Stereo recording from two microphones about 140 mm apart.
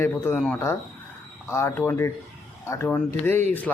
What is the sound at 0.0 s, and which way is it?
Speech, 15° left (ahead or behind).